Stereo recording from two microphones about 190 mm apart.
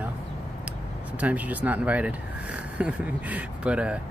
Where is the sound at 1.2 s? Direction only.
10° right (ahead or behind).